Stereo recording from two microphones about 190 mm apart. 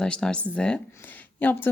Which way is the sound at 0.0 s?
5° left (ahead or behind).